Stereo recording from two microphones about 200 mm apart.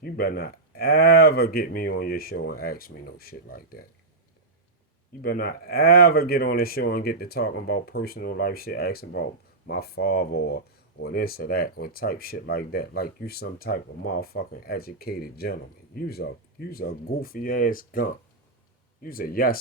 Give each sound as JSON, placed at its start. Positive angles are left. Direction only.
{"t": 0.0, "sound": "speech", "side_deg": 50}
{"t": 5.2, "sound": "speech", "side_deg": 50}